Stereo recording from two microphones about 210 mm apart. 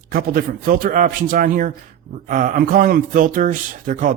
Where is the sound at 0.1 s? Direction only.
45° right (ahead or behind).